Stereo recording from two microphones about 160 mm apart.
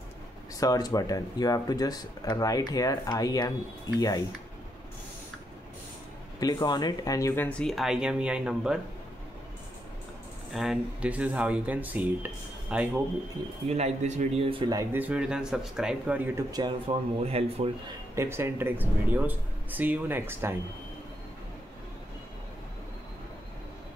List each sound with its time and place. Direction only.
0.6 s speech: 25° left (ahead or behind)
6.4 s speech: 25° left (ahead or behind); by 8.7 s 5° right (ahead or behind)
10.5 s speech: centre (ahead or behind)
13.7 s speech: 40° right (ahead or behind)
14.8 s speech: 10° right (ahead or behind)
16.3 s speech: 25° right (ahead or behind)
18.1 s speech: 15° right (ahead or behind)